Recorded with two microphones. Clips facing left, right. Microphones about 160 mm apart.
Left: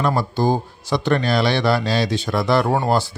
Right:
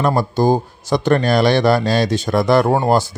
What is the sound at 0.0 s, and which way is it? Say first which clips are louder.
Speech: right 4 dB; 45° right (ahead or behind).